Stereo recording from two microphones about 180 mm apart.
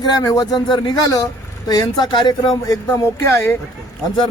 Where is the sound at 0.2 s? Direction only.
20° left (ahead or behind).